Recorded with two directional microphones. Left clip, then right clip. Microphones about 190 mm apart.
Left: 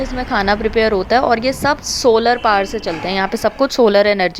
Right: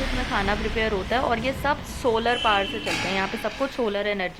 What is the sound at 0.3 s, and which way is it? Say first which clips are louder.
A woman's voice: left 11 dB; 35° left (ahead or behind).